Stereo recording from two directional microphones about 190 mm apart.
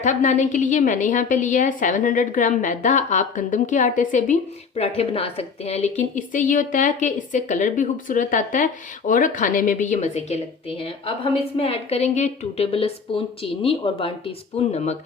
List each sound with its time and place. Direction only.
0.0 s a woman's voice: 40° left (ahead or behind)